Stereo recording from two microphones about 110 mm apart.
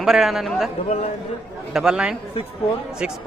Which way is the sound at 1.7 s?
5° right (ahead or behind).